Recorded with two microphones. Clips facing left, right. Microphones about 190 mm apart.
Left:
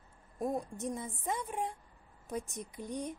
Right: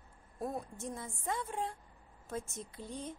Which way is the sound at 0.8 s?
20° left (ahead or behind).